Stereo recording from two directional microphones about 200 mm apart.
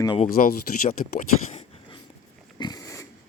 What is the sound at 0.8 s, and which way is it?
Speech, 35° left (ahead or behind).